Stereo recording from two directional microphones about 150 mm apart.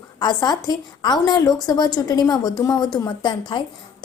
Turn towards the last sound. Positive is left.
turn(degrees=30)  # may be behind; listen again after turning